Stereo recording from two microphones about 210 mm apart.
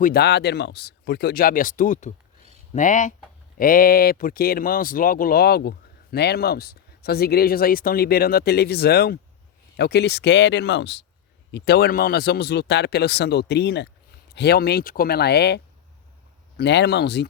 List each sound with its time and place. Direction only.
0.0 s speech: 50° left (ahead or behind)